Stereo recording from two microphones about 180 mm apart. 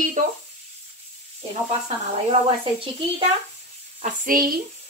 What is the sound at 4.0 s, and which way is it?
Speech, 50° right (ahead or behind).